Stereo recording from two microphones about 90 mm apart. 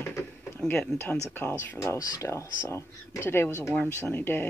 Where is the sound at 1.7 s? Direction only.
30° left (ahead or behind).